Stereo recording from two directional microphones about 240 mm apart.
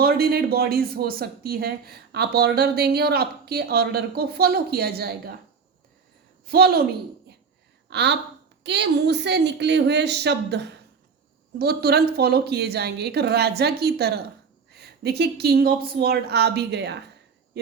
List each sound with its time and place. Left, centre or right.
0.0 s speech: right
6.5 s speech: right
7.9 s a woman's voice: right